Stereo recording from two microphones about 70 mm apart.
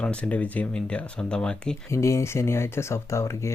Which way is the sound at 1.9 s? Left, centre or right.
Left.